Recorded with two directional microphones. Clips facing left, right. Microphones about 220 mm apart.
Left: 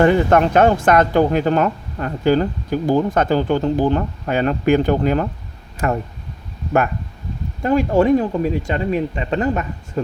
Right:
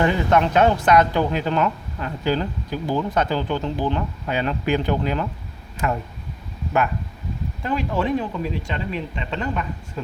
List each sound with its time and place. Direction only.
0.0 s speech: 50° left (ahead or behind)
7.6 s speech: 45° left (ahead or behind)